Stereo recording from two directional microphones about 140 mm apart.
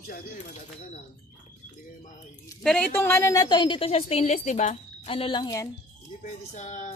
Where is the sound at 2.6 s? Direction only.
5° left (ahead or behind); by 5.7 s 25° left (ahead or behind).